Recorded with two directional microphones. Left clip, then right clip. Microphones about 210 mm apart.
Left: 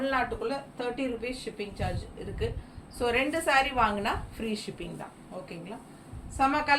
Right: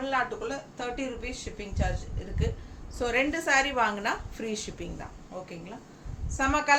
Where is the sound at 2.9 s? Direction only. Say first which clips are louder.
Even; 15° right (ahead or behind).